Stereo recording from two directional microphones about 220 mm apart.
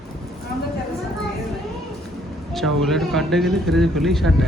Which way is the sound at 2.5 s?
Centre (ahead or behind).